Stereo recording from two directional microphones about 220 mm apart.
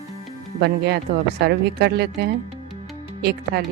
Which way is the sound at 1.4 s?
50° right (ahead or behind).